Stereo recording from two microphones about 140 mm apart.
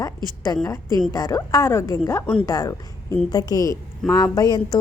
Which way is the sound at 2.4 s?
25° left (ahead or behind).